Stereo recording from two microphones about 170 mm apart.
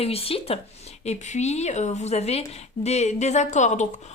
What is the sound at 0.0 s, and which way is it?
A woman's voice, 35° left (ahead or behind).